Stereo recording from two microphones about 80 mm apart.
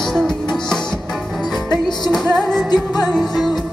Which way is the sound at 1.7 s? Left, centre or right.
Left.